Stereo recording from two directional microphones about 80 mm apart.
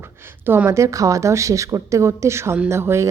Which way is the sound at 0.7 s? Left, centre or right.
Right.